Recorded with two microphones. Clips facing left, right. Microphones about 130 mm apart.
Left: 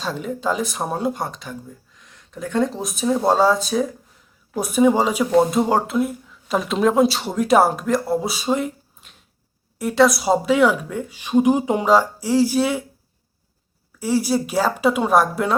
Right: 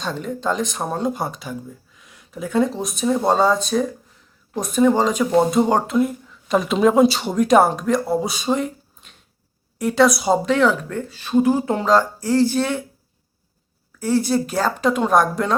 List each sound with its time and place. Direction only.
0.0 s speech: 5° left (ahead or behind)
1.2 s speech: 5° right (ahead or behind); by 12.8 s 10° left (ahead or behind)
14.0 s speech: 10° left (ahead or behind)